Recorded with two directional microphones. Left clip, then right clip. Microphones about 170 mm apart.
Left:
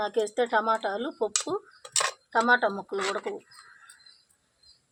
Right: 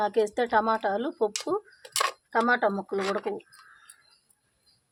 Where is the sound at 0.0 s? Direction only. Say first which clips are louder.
Right 2 dB; 45° right (ahead or behind).